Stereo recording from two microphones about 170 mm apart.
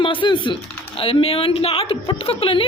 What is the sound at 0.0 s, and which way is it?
Speech, 30° left (ahead or behind).